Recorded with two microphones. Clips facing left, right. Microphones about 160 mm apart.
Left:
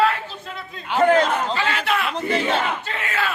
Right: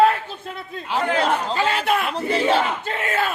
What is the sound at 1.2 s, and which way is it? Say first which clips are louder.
Speech: even; 35° right (ahead or behind).